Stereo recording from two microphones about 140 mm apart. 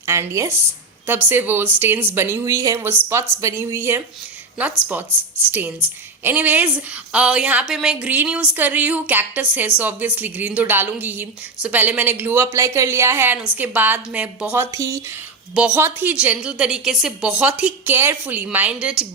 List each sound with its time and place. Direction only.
0.0 s a woman's voice: 20° right (ahead or behind)